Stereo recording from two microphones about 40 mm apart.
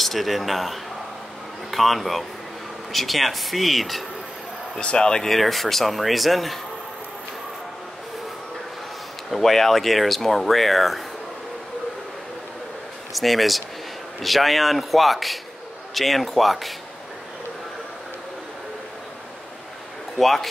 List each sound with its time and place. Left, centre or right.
0.0 s speech: centre
4.7 s speech: left
5.2 s speech: centre
9.3 s speech: centre
13.1 s speech: centre
20.2 s speech: centre